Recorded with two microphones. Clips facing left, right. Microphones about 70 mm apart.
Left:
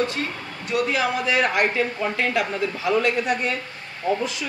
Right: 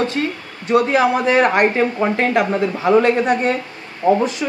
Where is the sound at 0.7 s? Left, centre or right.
Right.